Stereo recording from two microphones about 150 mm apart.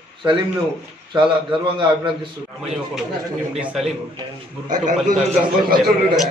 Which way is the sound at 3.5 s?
5° right (ahead or behind).